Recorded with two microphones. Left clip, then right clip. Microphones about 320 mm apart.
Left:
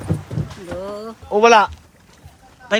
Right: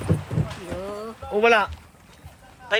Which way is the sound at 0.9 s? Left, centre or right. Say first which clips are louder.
Left 3 dB; left.